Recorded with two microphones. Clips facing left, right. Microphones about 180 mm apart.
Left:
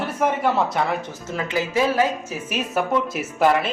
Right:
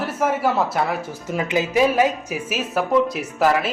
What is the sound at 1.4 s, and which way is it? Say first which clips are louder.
Speech: right 3 dB; 20° right (ahead or behind).